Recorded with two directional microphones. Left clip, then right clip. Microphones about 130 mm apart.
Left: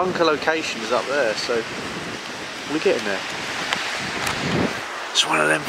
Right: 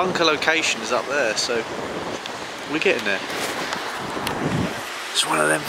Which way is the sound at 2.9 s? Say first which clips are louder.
Even; 15° right (ahead or behind).